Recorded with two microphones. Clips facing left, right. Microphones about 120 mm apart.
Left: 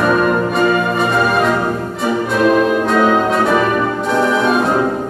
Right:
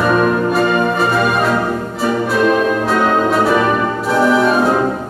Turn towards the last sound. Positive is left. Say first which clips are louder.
# right 2 dB
turn(degrees=0)  # may be behind; listen again after turning